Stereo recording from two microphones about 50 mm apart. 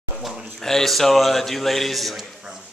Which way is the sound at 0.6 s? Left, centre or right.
Centre.